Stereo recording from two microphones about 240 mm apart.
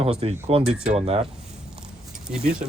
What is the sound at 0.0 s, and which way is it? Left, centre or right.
Speech, right.